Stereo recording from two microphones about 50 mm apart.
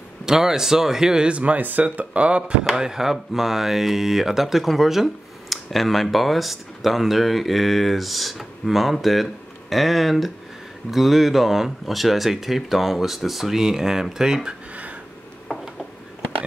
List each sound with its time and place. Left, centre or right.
0.2 s speech: centre
2.7 s speech: centre